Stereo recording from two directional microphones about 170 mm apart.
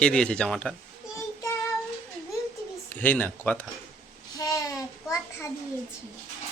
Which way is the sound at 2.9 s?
10° left (ahead or behind).